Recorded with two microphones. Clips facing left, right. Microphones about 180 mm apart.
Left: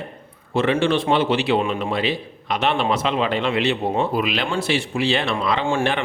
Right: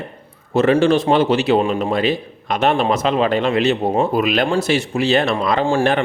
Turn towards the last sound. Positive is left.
turn(degrees=-40)  # may be behind; listen again after turning